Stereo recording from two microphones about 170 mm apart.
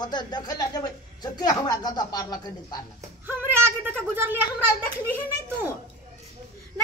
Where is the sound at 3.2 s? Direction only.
10° right (ahead or behind).